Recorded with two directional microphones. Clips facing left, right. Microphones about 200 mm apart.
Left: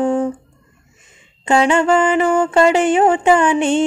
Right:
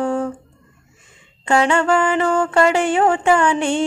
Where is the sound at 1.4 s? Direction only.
20° left (ahead or behind).